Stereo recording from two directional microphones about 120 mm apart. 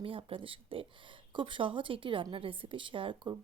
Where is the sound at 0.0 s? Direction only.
50° right (ahead or behind).